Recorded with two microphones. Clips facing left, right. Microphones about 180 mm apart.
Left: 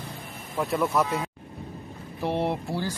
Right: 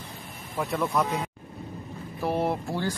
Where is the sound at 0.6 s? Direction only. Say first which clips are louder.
Left 2 dB; 5° left (ahead or behind).